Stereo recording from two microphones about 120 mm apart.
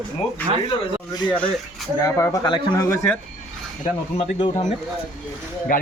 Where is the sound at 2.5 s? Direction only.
40° left (ahead or behind).